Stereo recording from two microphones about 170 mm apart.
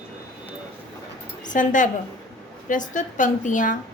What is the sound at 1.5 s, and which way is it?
A woman's voice, 50° left (ahead or behind).